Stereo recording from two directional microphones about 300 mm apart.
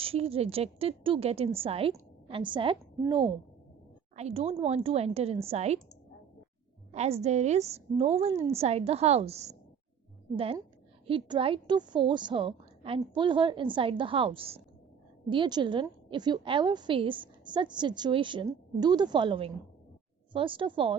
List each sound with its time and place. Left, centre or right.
0.0 s a woman's voice: centre
6.9 s a woman's voice: right